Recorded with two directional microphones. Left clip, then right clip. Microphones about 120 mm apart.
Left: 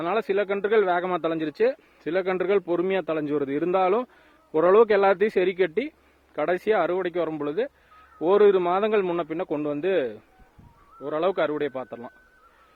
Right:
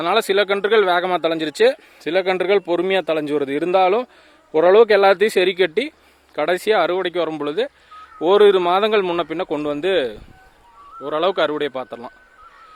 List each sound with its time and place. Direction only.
0.0 s speech: 20° right (ahead or behind)